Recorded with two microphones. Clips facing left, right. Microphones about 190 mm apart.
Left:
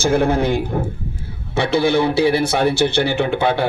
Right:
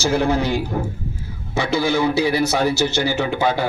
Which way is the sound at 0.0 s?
55° left (ahead or behind).